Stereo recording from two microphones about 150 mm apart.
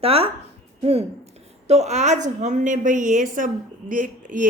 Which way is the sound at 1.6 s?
50° right (ahead or behind).